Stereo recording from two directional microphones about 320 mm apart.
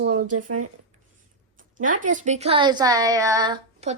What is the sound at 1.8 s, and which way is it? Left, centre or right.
A woman's voice, right.